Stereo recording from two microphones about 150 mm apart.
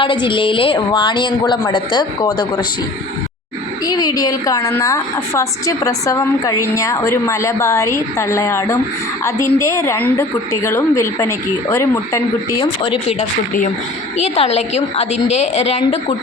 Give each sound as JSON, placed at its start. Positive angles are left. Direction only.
{"t": 0.0, "sound": "a woman's voice", "side_deg": 35}
{"t": 3.8, "sound": "a woman's voice", "side_deg": 25}
{"t": 12.8, "sound": "a woman's voice", "side_deg": 40}